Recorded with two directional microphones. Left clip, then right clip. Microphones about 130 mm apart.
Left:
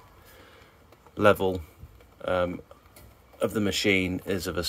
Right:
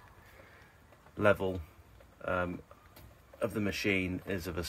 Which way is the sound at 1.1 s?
30° left (ahead or behind).